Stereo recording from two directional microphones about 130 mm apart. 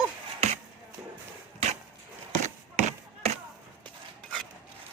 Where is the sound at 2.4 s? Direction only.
65° right (ahead or behind).